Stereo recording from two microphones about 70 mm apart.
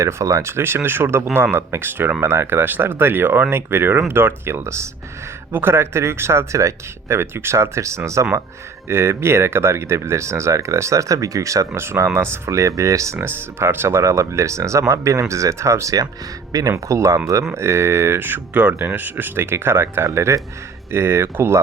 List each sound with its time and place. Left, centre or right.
0.0 s speech: right
5.5 s speech: right
13.2 s speech: right
16.5 s speech: right
16.7 s speech: right